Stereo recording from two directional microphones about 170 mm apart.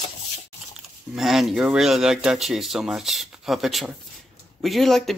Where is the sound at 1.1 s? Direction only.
Centre (ahead or behind).